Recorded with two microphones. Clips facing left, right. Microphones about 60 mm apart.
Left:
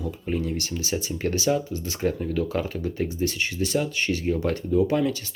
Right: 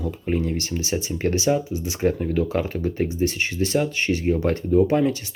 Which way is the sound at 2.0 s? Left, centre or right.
Right.